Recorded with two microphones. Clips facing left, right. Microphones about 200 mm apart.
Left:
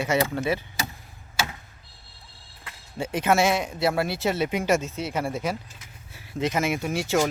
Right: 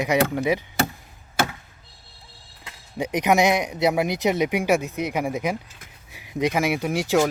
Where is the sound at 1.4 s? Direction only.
60° right (ahead or behind).